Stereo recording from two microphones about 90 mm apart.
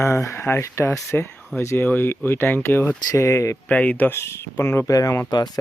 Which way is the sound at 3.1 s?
35° left (ahead or behind).